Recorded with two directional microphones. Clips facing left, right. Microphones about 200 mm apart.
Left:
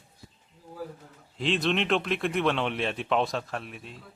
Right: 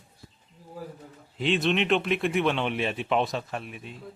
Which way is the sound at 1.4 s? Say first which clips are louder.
Right 2 dB; centre (ahead or behind).